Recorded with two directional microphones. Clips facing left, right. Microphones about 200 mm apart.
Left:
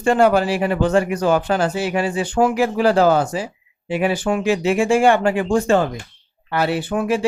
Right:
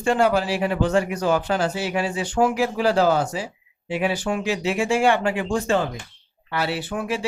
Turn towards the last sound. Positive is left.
turn(degrees=50)  # may be behind; listen again after turning